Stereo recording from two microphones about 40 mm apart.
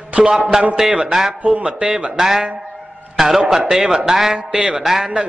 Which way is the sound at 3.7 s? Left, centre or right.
Centre.